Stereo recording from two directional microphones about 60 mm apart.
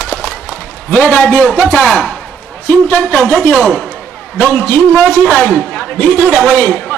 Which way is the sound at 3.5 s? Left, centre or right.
Centre.